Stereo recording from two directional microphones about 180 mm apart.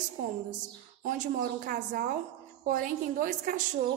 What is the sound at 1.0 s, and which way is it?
Speech, 50° right (ahead or behind).